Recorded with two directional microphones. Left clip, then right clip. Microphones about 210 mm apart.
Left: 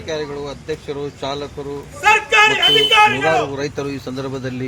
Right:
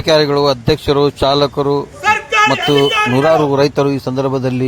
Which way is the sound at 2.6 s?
5° left (ahead or behind).